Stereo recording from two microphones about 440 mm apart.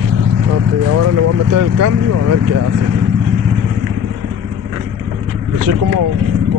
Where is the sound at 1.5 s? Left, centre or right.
Right.